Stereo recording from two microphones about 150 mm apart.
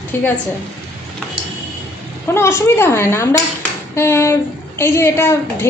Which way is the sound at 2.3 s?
15° left (ahead or behind).